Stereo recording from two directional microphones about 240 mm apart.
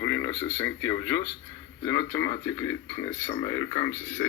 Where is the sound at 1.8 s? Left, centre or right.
Left.